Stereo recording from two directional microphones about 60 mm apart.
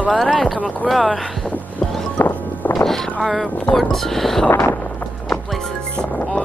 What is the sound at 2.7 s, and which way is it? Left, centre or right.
Music, centre.